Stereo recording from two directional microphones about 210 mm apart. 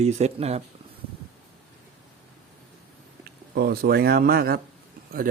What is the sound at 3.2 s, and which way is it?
Speech, 45° right (ahead or behind).